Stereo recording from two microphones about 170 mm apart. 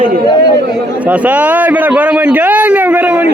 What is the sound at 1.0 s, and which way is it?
A man's voice, 10° right (ahead or behind).